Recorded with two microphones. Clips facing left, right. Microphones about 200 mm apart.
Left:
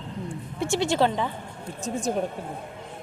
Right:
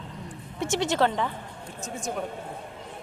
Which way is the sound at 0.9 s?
15° left (ahead or behind).